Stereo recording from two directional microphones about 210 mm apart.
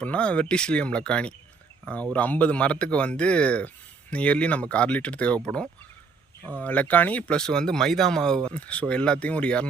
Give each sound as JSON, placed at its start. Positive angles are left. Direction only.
{"t": 0.0, "sound": "speech", "side_deg": 5}
{"t": 6.6, "sound": "speech", "side_deg": 5}